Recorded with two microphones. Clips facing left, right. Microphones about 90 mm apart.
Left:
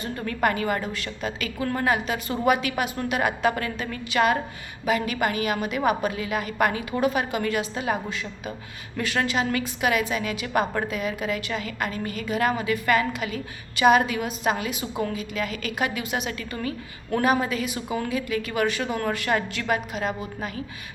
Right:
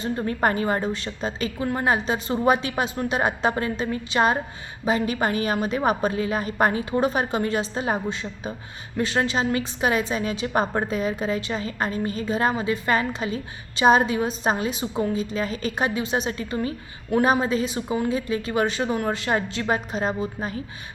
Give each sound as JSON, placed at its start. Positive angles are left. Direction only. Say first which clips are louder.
{"t": 0.0, "sound": "a woman's voice", "louder": "right 2 dB", "side_deg": -25}